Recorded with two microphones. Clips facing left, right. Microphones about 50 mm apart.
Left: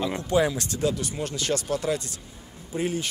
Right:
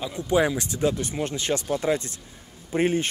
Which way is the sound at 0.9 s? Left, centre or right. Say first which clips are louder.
Right 2 dB; right.